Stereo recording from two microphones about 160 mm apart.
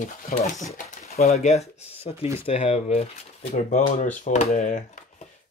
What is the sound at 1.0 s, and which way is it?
Speech, 45° left (ahead or behind).